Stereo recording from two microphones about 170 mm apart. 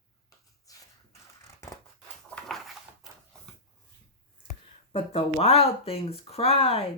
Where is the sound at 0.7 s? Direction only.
20° left (ahead or behind).